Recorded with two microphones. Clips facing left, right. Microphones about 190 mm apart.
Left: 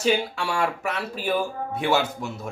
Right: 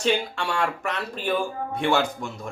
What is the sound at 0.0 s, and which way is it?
A woman's voice, 5° left (ahead or behind).